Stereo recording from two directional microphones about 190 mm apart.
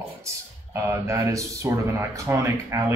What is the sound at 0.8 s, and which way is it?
Speech, 10° right (ahead or behind).